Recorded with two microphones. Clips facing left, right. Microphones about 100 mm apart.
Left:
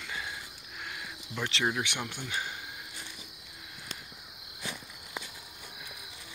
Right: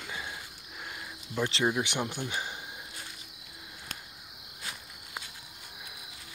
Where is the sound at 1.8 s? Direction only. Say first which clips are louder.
Right 4 dB; 30° right (ahead or behind).